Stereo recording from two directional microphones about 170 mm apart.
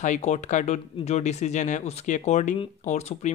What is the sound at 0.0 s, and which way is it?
Speech, 45° left (ahead or behind).